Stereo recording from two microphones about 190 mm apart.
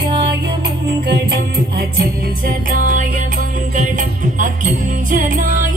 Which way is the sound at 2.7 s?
45° right (ahead or behind).